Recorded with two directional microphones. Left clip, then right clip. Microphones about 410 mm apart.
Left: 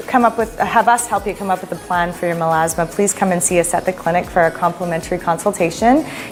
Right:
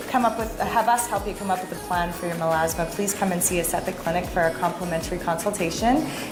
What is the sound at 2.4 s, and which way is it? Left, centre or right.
A woman's voice, left.